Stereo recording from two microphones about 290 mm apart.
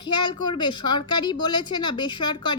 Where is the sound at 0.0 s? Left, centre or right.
Centre.